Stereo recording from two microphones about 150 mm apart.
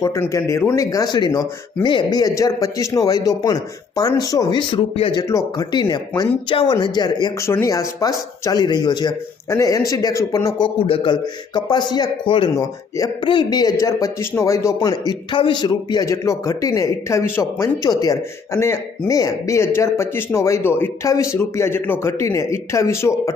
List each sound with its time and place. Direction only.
0.0 s a man's voice: 20° left (ahead or behind)
10.8 s a man's voice: 35° left (ahead or behind); by 23.3 s 20° left (ahead or behind)